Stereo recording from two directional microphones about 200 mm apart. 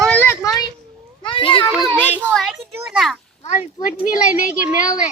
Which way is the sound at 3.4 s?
40° left (ahead or behind).